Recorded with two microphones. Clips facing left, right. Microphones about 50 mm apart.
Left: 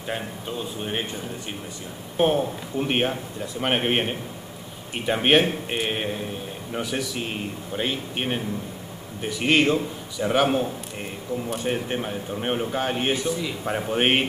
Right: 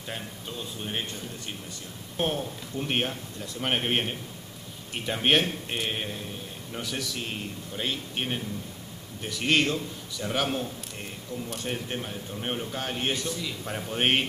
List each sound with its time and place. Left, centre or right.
0.1 s a man's voice: centre